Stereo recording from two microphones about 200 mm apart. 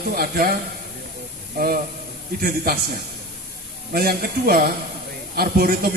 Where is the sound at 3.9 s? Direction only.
50° right (ahead or behind).